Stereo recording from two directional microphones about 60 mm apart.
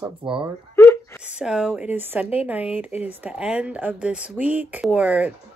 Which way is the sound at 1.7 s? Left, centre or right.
Right.